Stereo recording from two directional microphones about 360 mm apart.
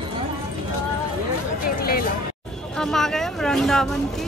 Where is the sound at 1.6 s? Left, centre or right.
Left.